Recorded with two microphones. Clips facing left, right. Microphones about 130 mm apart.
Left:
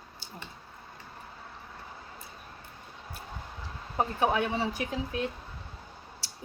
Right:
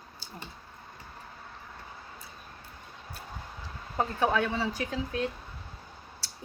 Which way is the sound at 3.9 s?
15° left (ahead or behind).